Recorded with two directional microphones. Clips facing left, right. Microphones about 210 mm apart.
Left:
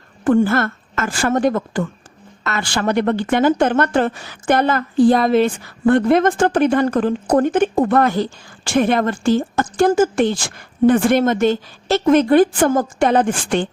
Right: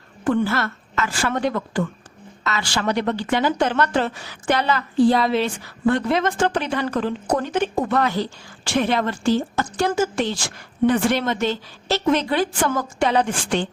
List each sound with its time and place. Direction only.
0.3 s speech: 45° left (ahead or behind)